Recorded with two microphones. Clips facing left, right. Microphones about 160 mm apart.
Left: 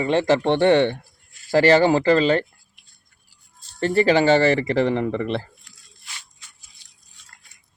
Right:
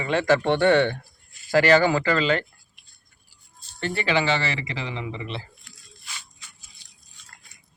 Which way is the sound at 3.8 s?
40° left (ahead or behind).